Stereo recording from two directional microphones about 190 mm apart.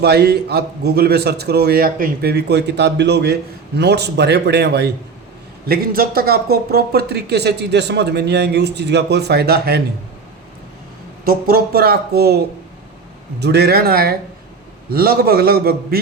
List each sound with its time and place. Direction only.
0.0 s speech: 55° right (ahead or behind)
11.3 s a man's voice: 50° right (ahead or behind)